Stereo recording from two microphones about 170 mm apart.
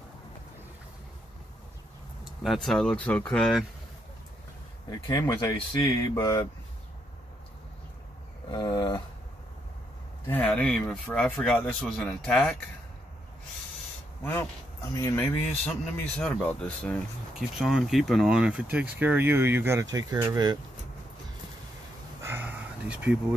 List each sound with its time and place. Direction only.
2.4 s speech: centre (ahead or behind)
5.0 s speech: 15° left (ahead or behind)
8.5 s a sound: 25° left (ahead or behind)
10.2 s speech: 10° left (ahead or behind)
15.0 s speech: 15° left (ahead or behind); by 20.5 s 25° right (ahead or behind)
22.2 s a sound: 10° right (ahead or behind)